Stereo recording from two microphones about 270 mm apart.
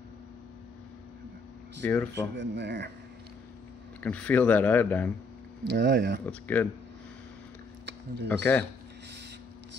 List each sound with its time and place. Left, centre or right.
1.8 s speech: centre
2.3 s speech: right
4.0 s speech: centre
5.7 s speech: right
6.2 s speech: centre
8.3 s speech: centre